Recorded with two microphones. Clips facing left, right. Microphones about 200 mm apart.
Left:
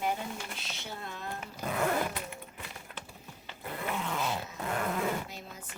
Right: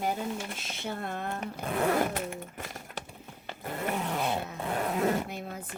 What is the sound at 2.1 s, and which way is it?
Dog, 45° right (ahead or behind).